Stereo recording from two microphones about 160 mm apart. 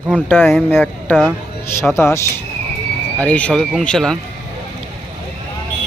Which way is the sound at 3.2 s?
10° left (ahead or behind).